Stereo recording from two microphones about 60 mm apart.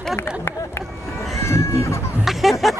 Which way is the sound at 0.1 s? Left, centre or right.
Left.